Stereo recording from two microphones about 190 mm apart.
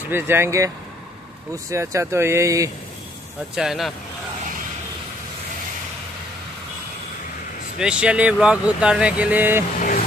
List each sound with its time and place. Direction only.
0.0 s speech: 10° right (ahead or behind)
3.5 s speech: centre (ahead or behind)
7.8 s speech: 5° right (ahead or behind)
9.8 s vehicle: 40° left (ahead or behind)